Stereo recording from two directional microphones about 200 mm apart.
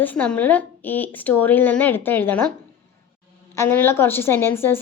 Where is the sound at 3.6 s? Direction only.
10° left (ahead or behind).